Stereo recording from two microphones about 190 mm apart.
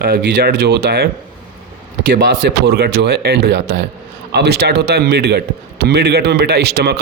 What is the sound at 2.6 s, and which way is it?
A man's voice, 55° right (ahead or behind).